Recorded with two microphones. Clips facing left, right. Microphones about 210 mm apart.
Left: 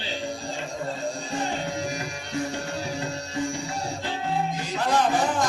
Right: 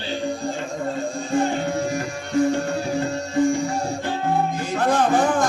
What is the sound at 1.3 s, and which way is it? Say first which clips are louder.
Music: right 11 dB; 55° right (ahead or behind).